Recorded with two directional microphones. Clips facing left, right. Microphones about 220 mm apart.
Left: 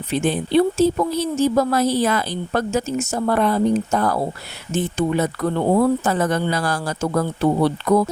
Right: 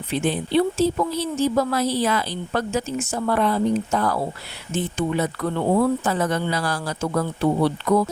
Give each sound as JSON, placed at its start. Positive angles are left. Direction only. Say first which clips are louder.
{"t": 0.1, "sound": "speech", "louder": "left 3 dB", "side_deg": 45}